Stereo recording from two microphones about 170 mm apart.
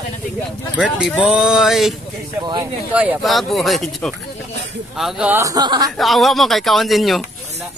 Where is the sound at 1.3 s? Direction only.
5° right (ahead or behind).